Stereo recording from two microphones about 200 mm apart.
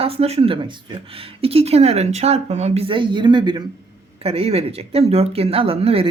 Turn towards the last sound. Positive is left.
turn(degrees=-30)  # may be behind; listen again after turning